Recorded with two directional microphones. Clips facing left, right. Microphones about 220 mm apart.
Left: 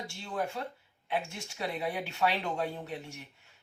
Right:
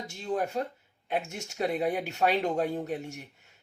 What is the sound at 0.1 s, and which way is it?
Speech, 40° right (ahead or behind).